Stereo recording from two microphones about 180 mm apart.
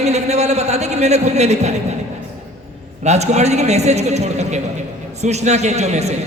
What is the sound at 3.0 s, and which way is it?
A man's voice, 40° right (ahead or behind).